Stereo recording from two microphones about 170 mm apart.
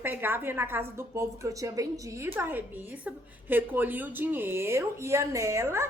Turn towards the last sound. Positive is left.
turn(degrees=-15)  # may be behind; listen again after turning